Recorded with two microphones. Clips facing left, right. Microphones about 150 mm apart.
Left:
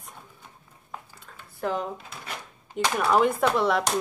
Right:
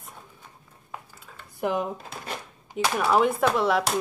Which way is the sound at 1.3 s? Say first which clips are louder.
Right 1 dB; 5° right (ahead or behind).